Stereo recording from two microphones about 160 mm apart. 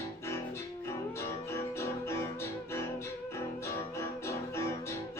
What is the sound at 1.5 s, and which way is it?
Music, 15° left (ahead or behind).